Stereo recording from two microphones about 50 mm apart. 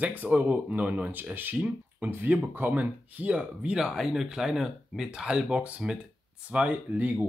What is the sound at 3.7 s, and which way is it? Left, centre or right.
Speech, centre.